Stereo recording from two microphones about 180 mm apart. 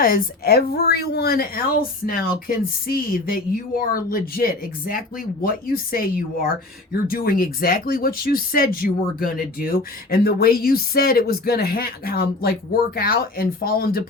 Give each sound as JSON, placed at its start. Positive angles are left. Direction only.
{"t": 0.0, "sound": "speech", "side_deg": 55}